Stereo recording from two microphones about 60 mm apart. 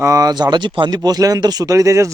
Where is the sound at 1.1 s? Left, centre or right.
Right.